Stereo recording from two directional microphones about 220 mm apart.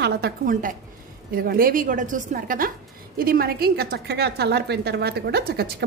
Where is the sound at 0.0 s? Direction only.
45° right (ahead or behind).